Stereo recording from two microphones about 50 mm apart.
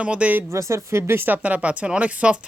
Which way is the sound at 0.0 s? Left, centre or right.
Right.